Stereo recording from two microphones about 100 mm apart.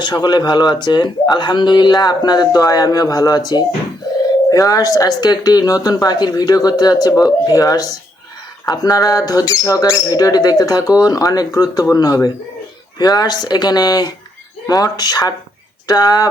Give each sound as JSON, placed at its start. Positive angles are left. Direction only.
{"t": 0.0, "sound": "speech", "side_deg": 45}